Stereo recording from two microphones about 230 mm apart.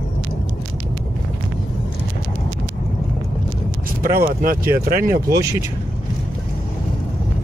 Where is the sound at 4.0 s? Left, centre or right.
Right.